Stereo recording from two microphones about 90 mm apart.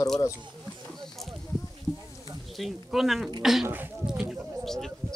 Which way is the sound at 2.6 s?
Centre (ahead or behind).